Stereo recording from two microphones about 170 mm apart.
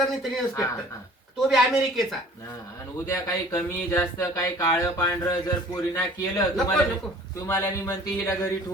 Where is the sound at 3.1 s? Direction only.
20° left (ahead or behind).